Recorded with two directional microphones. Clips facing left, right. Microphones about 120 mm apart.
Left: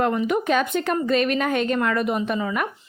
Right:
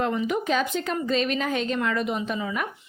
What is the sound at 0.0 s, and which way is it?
A woman's voice, 55° left (ahead or behind).